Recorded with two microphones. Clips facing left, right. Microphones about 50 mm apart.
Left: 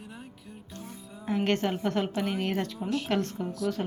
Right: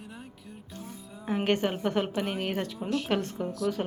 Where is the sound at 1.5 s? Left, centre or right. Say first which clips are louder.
Right 2 dB; centre.